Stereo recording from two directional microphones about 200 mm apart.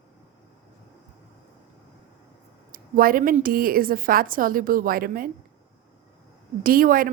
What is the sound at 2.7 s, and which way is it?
A woman's voice, 45° right (ahead or behind).